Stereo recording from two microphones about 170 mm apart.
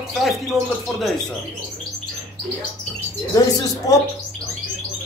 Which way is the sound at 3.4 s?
20° left (ahead or behind).